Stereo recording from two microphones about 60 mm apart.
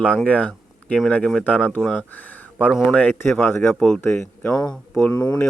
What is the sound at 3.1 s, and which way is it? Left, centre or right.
Speech, left.